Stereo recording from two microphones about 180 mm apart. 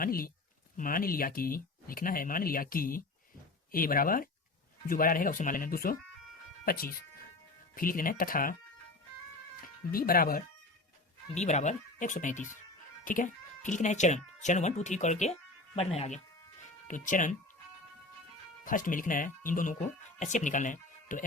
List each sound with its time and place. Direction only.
0.0 s speech: 55° left (ahead or behind)
9.9 s speech: 55° left (ahead or behind)
11.3 s speech: 40° left (ahead or behind)
18.6 s speech: 50° left (ahead or behind)